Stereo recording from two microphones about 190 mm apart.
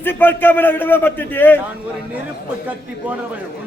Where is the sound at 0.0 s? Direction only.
10° left (ahead or behind).